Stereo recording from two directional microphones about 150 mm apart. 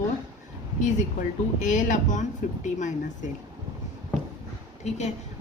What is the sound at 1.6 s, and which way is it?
A woman's voice, 55° left (ahead or behind).